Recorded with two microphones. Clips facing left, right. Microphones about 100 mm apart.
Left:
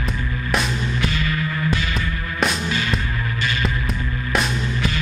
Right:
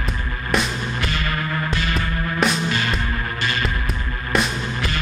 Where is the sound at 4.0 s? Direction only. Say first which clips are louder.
Left 2 dB; 50° right (ahead or behind).